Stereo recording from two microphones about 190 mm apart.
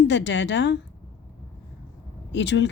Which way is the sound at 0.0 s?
70° left (ahead or behind).